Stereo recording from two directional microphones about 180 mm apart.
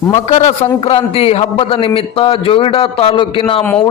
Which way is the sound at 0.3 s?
35° left (ahead or behind).